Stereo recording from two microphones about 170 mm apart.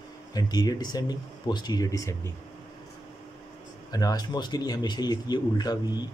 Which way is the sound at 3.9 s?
20° left (ahead or behind).